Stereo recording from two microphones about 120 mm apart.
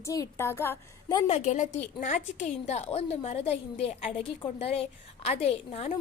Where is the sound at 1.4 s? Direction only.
85° left; by 5.9 s 55° left (ahead or behind).